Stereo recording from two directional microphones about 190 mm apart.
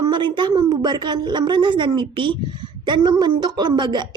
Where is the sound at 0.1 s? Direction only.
25° right (ahead or behind).